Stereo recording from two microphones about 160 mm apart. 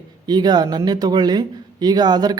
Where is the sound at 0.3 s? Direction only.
25° right (ahead or behind).